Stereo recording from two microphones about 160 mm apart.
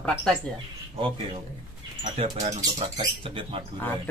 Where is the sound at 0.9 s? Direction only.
35° right (ahead or behind).